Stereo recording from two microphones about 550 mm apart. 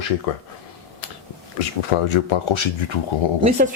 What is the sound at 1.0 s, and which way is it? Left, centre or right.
Finger snapping, left.